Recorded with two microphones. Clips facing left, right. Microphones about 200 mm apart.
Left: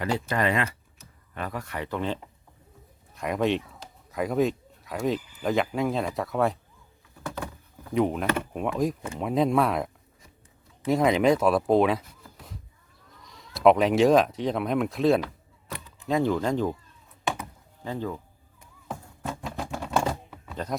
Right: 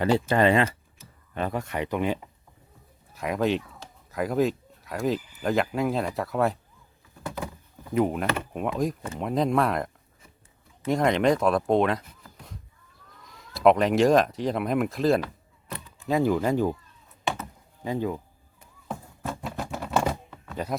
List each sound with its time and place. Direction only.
0.0 s speech: 30° right (ahead or behind); by 2.3 s 15° right (ahead or behind)
3.2 s speech: centre (ahead or behind)
7.2 s a sound: 15° right (ahead or behind)
7.9 s speech: 5° right (ahead or behind)
17.8 s speech: 15° right (ahead or behind)
18.9 s typewriter: centre (ahead or behind)
20.3 s music: 5° left (ahead or behind)